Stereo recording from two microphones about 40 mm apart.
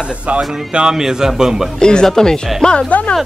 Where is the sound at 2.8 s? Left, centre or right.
Left.